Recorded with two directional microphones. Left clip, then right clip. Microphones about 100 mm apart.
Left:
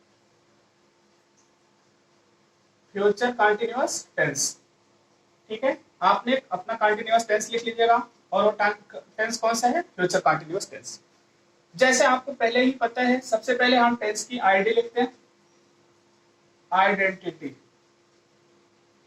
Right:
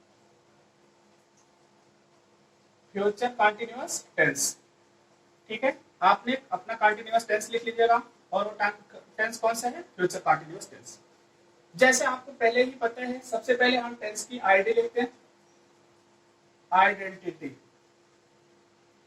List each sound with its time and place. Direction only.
2.9 s speech: 25° left (ahead or behind)
16.6 s a man's voice: 30° left (ahead or behind)